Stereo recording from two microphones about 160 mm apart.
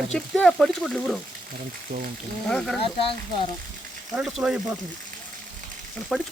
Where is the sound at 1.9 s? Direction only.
65° right (ahead or behind).